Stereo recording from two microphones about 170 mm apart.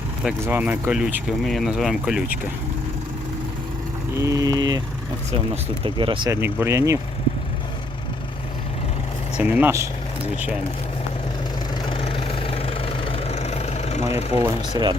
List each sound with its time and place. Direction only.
0.4 s speech: 10° right (ahead or behind)
4.2 s speech: 20° right (ahead or behind)
5.8 s speech: 30° right (ahead or behind)
6.3 s speech: 15° right (ahead or behind)
9.4 s speech: 10° right (ahead or behind)
11.9 s vehicle: 35° left (ahead or behind)
14.8 s speech: 20° right (ahead or behind)